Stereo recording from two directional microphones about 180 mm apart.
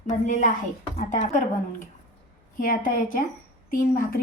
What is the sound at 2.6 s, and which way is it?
Speech, 50° left (ahead or behind).